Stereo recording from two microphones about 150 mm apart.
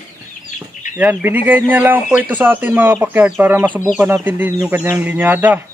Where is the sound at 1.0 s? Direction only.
10° right (ahead or behind).